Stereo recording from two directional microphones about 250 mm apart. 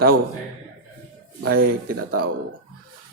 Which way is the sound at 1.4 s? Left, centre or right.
Right.